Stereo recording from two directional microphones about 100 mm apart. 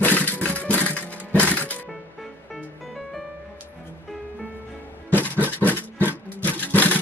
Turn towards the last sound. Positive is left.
turn(degrees=15)  # may be behind; listen again after turning